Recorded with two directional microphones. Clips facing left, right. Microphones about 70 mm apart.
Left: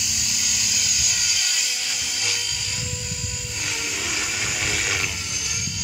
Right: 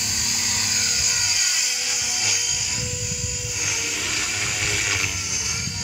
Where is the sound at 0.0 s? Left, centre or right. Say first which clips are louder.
Right 1 dB; right; by 2.4 s centre.